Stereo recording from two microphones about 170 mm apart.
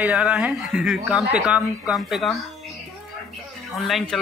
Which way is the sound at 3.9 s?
Centre (ahead or behind).